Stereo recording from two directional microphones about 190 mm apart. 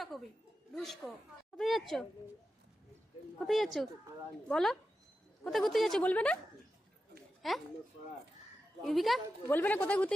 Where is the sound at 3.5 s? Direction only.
Centre (ahead or behind).